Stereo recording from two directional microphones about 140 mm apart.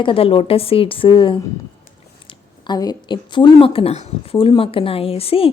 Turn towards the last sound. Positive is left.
turn(degrees=40)  # may be behind; listen again after turning